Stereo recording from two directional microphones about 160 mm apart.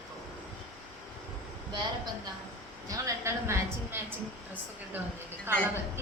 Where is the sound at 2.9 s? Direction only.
20° right (ahead or behind).